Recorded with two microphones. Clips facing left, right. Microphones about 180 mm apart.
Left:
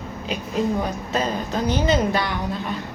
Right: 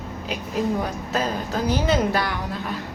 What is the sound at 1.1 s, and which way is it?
A woman's voice, 5° right (ahead or behind).